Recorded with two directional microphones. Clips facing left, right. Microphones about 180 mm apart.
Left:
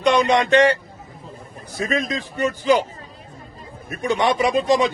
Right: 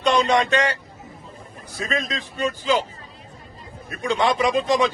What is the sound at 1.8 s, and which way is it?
Speech, 20° left (ahead or behind).